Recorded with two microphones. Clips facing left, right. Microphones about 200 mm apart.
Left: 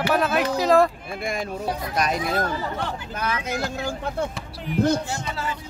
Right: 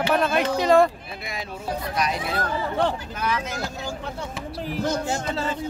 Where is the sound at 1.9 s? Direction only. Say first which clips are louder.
Left 3 dB; 45° left (ahead or behind).